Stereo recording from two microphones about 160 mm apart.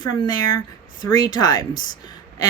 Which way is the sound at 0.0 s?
25° left (ahead or behind).